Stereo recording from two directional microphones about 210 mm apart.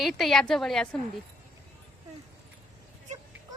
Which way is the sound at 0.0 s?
Centre (ahead or behind).